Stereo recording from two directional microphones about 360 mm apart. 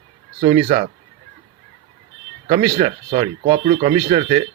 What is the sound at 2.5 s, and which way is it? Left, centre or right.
Speech, centre.